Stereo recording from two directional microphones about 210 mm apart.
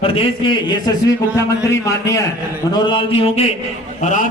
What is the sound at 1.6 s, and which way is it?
A man's voice, 15° left (ahead or behind).